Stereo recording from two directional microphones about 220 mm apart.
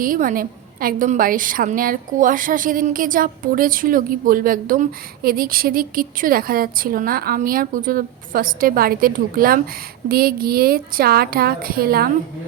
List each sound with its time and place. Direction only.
0.0 s a woman's voice: 40° right (ahead or behind)